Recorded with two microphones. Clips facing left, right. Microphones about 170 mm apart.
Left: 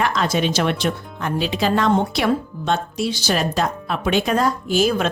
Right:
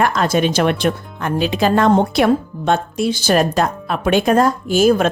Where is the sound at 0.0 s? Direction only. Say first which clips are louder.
Right 4 dB; 50° right (ahead or behind).